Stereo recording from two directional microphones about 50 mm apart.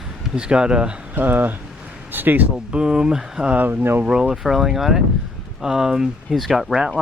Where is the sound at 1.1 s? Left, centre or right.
Right.